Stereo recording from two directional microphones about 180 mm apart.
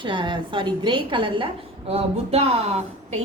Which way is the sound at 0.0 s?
25° right (ahead or behind).